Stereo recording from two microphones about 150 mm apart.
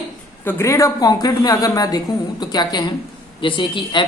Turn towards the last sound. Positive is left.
turn(degrees=35)  # may be behind; listen again after turning